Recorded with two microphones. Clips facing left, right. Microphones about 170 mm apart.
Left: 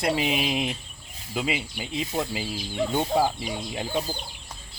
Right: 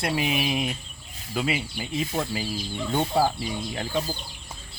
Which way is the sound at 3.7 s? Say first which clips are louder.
Even; 10° left (ahead or behind).